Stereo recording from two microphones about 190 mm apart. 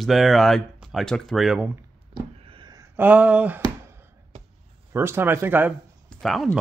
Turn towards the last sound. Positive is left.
turn(degrees=0)  # may be behind; listen again after turning